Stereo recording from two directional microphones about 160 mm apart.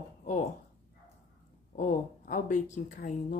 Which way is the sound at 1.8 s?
55° left (ahead or behind).